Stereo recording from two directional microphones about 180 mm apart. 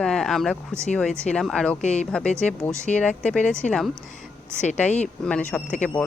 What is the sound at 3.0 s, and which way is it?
Speech, 5° left (ahead or behind).